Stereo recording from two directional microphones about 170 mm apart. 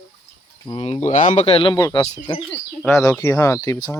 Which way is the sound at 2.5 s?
15° left (ahead or behind).